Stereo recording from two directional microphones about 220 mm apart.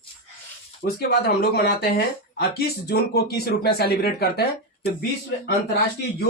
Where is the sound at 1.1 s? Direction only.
45° left (ahead or behind).